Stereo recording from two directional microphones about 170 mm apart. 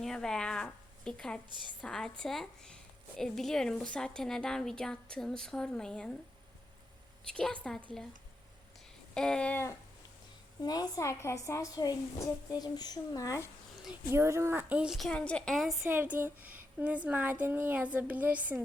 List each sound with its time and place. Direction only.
0.0 s a woman's voice: 5° left (ahead or behind)
7.3 s a woman's voice: 5° left (ahead or behind)
9.1 s a sound: 5° left (ahead or behind)
10.6 s a woman's voice: 25° left (ahead or behind)
14.1 s a woman's voice: 15° right (ahead or behind); by 15.7 s centre (ahead or behind)
15.8 s speech: 10° right (ahead or behind)